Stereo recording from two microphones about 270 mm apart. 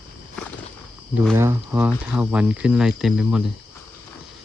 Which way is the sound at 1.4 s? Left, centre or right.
Centre.